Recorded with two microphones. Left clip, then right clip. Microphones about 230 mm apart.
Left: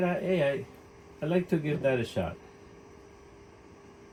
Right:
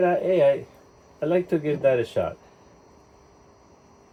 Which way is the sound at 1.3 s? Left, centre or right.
Right.